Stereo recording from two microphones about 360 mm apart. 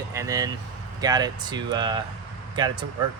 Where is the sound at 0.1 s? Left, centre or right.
Centre.